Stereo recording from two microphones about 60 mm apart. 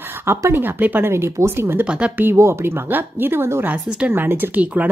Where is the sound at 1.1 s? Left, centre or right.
Right.